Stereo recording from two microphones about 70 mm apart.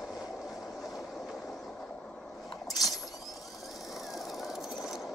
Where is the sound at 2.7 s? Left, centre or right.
Left.